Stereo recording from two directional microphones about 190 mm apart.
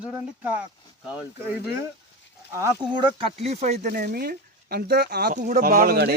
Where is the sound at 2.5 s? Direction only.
20° right (ahead or behind).